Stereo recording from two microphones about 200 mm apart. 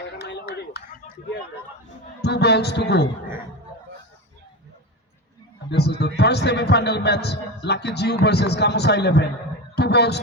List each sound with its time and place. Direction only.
0.2 s a sound: 55° left (ahead or behind)
2.2 s a man's voice: 55° left (ahead or behind)
5.7 s a man's voice: 55° left (ahead or behind)